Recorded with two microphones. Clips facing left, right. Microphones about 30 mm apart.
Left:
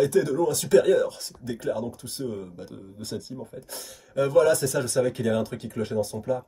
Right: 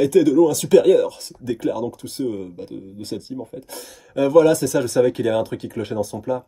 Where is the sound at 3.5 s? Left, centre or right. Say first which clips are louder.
Right 5 dB; right.